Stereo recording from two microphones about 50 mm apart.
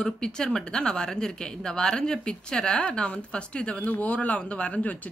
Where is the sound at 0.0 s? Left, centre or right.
Centre.